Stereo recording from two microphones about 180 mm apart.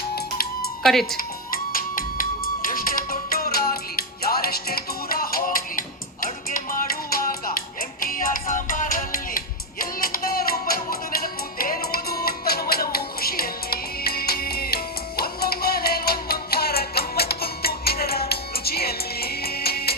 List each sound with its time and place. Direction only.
0.8 s speech: centre (ahead or behind)
1.1 s music: 55° left (ahead or behind)
7.1 s music: 50° left (ahead or behind)